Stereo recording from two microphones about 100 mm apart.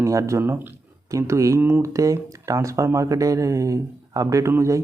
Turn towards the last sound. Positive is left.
turn(degrees=-30)  # may be behind; listen again after turning